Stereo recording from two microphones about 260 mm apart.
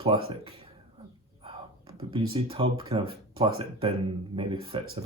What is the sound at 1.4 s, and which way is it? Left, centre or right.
Speech, right.